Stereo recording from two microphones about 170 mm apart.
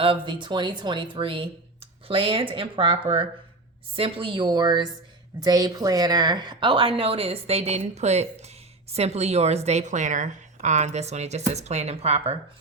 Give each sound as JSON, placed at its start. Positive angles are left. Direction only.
{"t": 0.0, "sound": "speech", "side_deg": -30}